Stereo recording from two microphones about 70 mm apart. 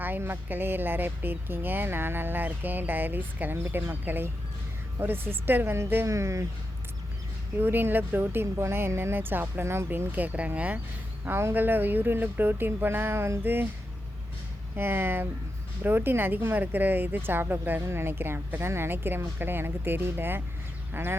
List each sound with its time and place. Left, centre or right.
0.0 s a woman's voice: right
6.1 s speech: right
7.6 s speech: right
11.3 s a woman's voice: right
14.8 s a woman's voice: right